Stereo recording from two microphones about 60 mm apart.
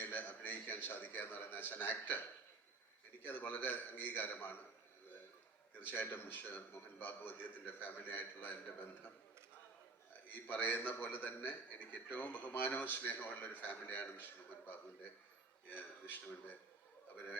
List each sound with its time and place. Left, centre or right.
0.0 s a sound: left
3.2 s a man's voice: left
5.9 s a man's voice: left
10.3 s a man's voice: left